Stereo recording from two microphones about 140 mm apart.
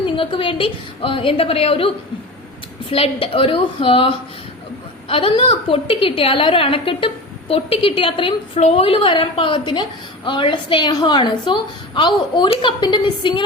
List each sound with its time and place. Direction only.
0.0 s a woman's voice: 40° left (ahead or behind)
2.9 s a woman's voice: 40° left (ahead or behind)